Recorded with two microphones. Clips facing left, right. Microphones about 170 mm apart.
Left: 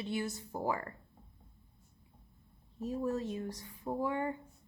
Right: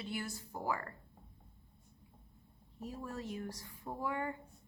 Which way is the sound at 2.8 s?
25° left (ahead or behind).